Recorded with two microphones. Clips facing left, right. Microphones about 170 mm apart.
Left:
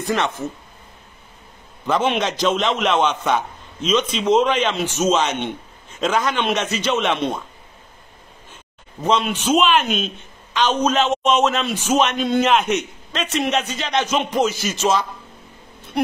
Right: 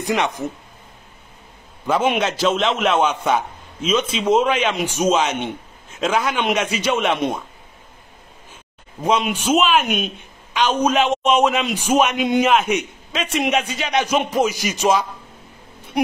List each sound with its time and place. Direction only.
0.0 s a man's voice: 15° right (ahead or behind)
1.9 s a man's voice: 10° right (ahead or behind)
9.0 s a man's voice: 10° right (ahead or behind)